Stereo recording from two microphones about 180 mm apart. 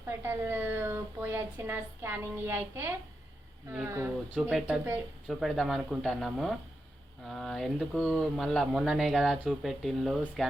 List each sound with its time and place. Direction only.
0.2 s speech: 15° right (ahead or behind)
4.4 s speech: 5° right (ahead or behind)